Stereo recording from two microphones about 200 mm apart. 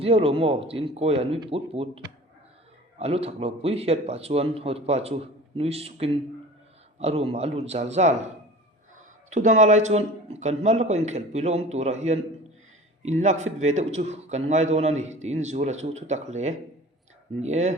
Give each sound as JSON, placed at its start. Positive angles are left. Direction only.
{"t": 0.0, "sound": "speech", "side_deg": -30}
{"t": 3.0, "sound": "a man's voice", "side_deg": -30}